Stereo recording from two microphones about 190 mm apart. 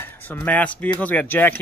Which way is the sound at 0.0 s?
10° left (ahead or behind).